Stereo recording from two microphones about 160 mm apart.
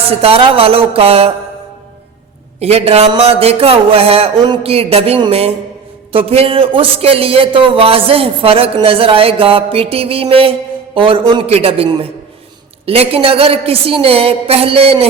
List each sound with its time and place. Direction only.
0.2 s speech: 35° right (ahead or behind)
2.6 s speech: 40° right (ahead or behind)